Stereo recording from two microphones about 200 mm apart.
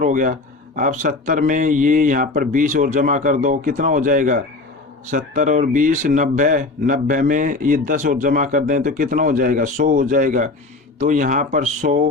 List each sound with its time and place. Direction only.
0.0 s speech: 40° right (ahead or behind)